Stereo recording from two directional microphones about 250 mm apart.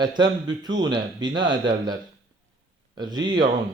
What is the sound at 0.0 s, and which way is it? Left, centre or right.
A man's voice, centre.